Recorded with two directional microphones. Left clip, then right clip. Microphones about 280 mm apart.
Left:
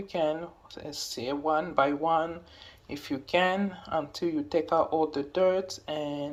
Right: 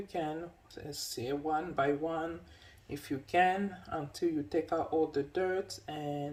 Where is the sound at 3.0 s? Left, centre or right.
Centre.